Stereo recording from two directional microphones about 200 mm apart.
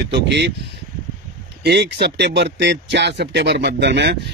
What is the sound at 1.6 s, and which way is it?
Speech, 55° right (ahead or behind).